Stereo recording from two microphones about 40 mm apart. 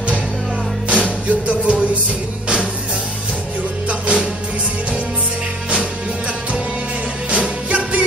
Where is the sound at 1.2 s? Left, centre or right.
Right.